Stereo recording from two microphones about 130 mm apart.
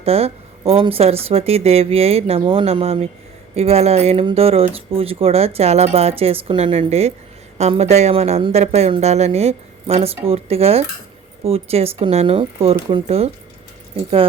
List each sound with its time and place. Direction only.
0.0 s speech: 50° right (ahead or behind)